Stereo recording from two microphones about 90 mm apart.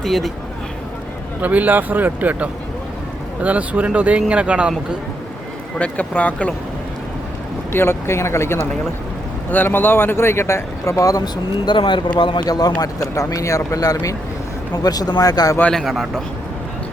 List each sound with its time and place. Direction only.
0.0 s a man's voice: centre (ahead or behind)
1.4 s speech: 20° right (ahead or behind)
5.8 s speech: 15° left (ahead or behind)
7.7 s speech: 25° left (ahead or behind)
11.6 s speech: 60° left (ahead or behind)
12.5 s speech: 45° left (ahead or behind)
15.7 s a man's voice: centre (ahead or behind)